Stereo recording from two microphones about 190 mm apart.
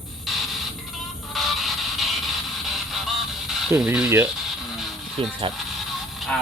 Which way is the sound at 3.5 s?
Centre (ahead or behind).